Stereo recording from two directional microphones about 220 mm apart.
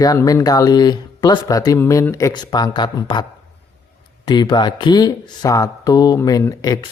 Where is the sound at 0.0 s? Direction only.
15° left (ahead or behind).